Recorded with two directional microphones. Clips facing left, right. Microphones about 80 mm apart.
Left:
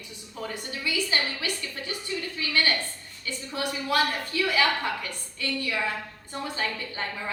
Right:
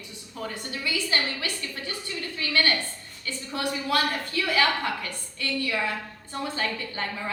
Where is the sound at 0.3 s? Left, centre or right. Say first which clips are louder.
Right 1 dB; centre.